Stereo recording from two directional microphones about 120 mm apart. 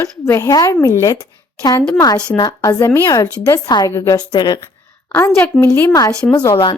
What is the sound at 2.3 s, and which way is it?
A woman's voice, 30° left (ahead or behind).